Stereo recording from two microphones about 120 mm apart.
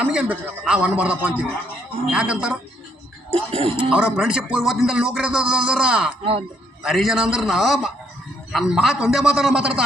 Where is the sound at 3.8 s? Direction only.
10° right (ahead or behind).